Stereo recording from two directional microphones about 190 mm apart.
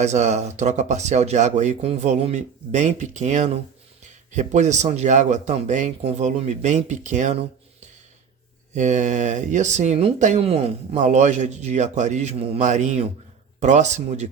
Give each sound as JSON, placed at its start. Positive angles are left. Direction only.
{"t": 0.0, "sound": "speech", "side_deg": -35}
{"t": 8.7, "sound": "speech", "side_deg": -40}